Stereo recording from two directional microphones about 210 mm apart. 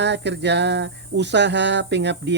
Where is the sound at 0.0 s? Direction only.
55° right (ahead or behind).